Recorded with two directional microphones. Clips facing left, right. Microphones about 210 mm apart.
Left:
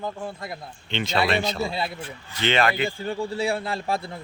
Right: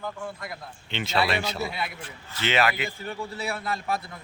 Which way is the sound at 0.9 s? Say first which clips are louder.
Left 3 dB; 5° right (ahead or behind).